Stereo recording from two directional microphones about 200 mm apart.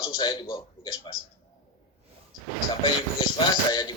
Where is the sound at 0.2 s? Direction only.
20° left (ahead or behind).